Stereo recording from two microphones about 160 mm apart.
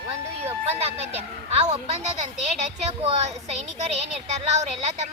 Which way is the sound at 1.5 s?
40° right (ahead or behind).